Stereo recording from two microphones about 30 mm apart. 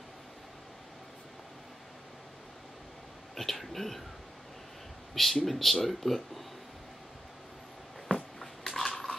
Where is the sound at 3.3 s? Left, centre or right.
Centre.